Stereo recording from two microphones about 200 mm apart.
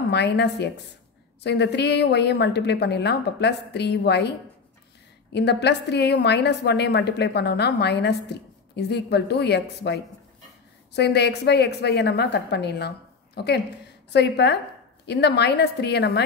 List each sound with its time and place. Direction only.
0.1 s a woman's voice: 60° left (ahead or behind)
5.3 s a woman's voice: 55° left (ahead or behind)